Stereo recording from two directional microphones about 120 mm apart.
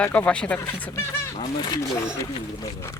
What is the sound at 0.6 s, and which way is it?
Speech, 25° left (ahead or behind).